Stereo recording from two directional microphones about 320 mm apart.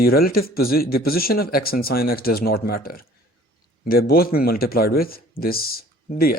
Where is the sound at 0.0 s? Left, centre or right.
Left.